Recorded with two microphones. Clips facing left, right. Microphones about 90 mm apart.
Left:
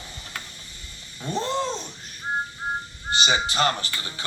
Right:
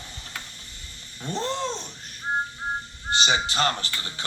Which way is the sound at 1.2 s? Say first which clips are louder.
Left 2 dB; 15° left (ahead or behind).